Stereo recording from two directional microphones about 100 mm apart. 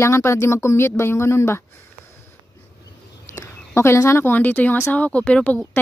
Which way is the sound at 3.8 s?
25° left (ahead or behind).